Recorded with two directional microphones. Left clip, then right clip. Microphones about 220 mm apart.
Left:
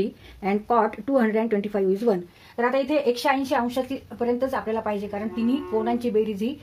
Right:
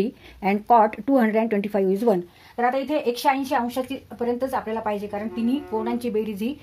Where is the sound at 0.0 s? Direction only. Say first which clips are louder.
Right 2 dB; 40° right (ahead or behind).